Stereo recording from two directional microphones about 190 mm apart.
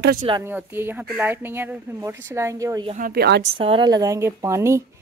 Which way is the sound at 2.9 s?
50° right (ahead or behind).